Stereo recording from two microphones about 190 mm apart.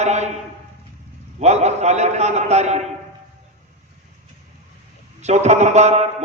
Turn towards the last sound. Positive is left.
turn(degrees=-35)  # may be behind; listen again after turning